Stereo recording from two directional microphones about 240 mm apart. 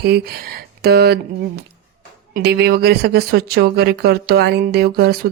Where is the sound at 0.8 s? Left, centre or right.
Right.